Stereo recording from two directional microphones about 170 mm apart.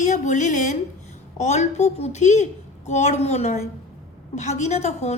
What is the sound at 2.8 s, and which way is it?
A child's voice, 40° left (ahead or behind).